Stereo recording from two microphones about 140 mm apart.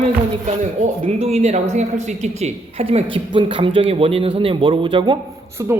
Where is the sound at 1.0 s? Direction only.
50° right (ahead or behind).